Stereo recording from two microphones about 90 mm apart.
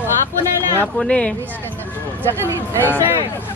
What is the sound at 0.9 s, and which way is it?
Speech, 10° left (ahead or behind).